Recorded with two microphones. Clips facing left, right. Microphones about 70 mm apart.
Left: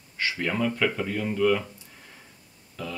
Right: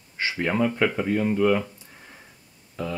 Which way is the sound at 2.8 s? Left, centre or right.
Right.